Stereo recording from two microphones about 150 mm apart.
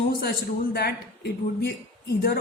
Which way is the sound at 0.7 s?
90° left.